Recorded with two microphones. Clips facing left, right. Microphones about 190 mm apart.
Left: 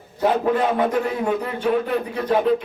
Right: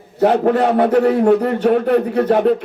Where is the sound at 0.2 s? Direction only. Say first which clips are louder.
Right 5 dB; 65° right (ahead or behind).